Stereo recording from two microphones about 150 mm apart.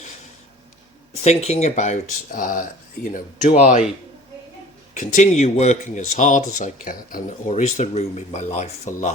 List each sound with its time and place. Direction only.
1.2 s speech: 45° left (ahead or behind)
4.9 s speech: 55° left (ahead or behind)